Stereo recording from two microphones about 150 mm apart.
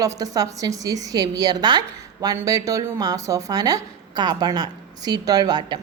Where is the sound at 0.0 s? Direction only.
25° right (ahead or behind).